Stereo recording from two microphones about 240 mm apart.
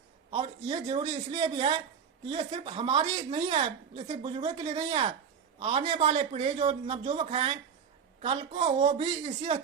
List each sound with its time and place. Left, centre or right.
0.3 s speech: right